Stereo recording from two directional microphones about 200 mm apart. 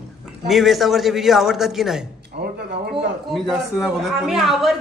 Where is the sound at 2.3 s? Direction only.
55° right (ahead or behind).